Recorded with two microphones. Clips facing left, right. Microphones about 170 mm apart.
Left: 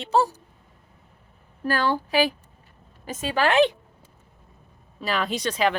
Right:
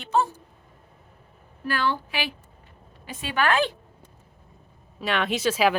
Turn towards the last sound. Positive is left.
turn(degrees=-5)  # may be behind; listen again after turning